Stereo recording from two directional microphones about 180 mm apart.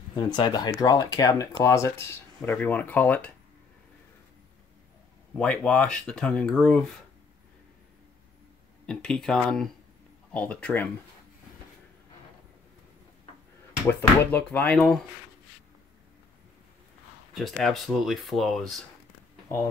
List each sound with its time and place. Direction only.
0.1 s speech: 25° left (ahead or behind); by 3.3 s 10° left (ahead or behind)
5.3 s speech: 5° left (ahead or behind)
8.8 s speech: 5° left (ahead or behind)
13.8 s speech: 10° left (ahead or behind)
17.3 s speech: centre (ahead or behind)